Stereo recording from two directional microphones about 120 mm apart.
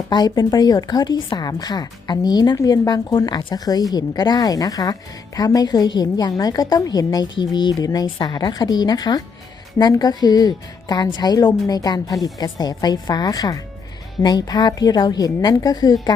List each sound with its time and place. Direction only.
0.1 s a woman's voice: 35° left (ahead or behind)